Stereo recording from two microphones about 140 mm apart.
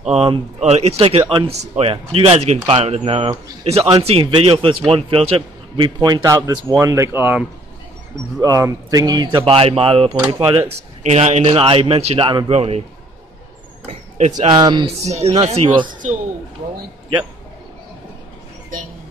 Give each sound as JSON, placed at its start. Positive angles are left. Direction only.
{"t": 0.1, "sound": "a man's voice", "side_deg": -45}
{"t": 12.4, "sound": "a man's voice", "side_deg": -50}
{"t": 13.8, "sound": "speech", "side_deg": -55}
{"t": 14.5, "sound": "speech", "side_deg": -30}
{"t": 15.0, "sound": "a man's voice", "side_deg": -50}
{"t": 15.9, "sound": "a man's voice", "side_deg": -70}